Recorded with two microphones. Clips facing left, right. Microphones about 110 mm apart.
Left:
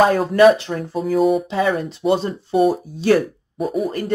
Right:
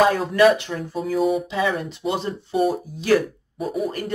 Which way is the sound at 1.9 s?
30° left (ahead or behind).